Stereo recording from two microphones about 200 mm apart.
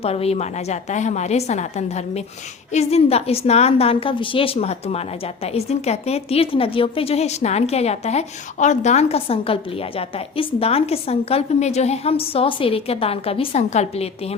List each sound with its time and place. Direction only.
0.0 s a woman's voice: 30° left (ahead or behind)
2.7 s a woman's voice: 30° left (ahead or behind)